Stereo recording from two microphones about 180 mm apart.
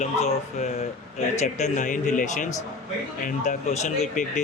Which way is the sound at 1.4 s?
40° left (ahead or behind).